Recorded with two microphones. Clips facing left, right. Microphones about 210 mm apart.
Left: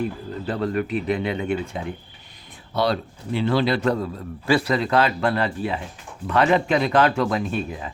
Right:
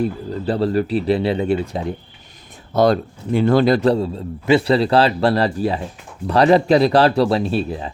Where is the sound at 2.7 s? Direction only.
45° right (ahead or behind).